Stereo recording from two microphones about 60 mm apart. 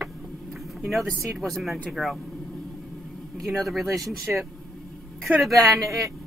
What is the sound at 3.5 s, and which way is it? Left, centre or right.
Speech, centre.